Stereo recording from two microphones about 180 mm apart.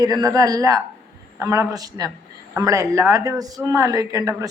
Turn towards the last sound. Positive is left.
turn(degrees=-20)  # may be behind; listen again after turning